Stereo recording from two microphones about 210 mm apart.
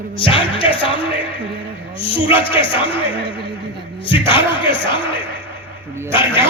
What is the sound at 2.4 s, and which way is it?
Speech, 25° left (ahead or behind).